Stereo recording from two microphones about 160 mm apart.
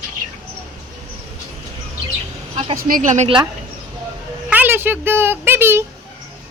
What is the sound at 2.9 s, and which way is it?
Speech, 50° right (ahead or behind).